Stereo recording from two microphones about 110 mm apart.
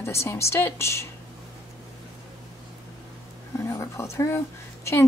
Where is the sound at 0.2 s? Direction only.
25° left (ahead or behind).